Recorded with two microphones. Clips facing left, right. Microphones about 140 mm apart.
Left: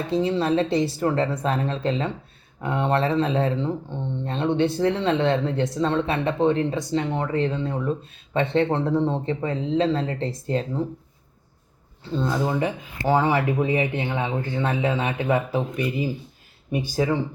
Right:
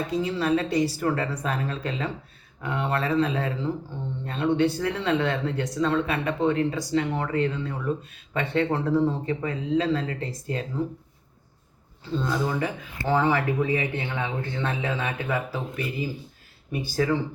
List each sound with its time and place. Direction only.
0.1 s speech: 25° left (ahead or behind)
12.2 s speech: 25° left (ahead or behind)